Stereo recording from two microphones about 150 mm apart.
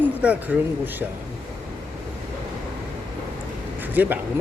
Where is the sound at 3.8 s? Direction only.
10° right (ahead or behind).